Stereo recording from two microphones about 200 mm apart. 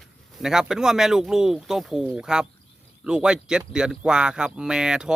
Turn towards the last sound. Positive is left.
turn(degrees=-5)  # may be behind; listen again after turning